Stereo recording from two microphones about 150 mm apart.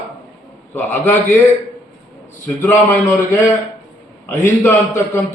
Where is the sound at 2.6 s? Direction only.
15° left (ahead or behind).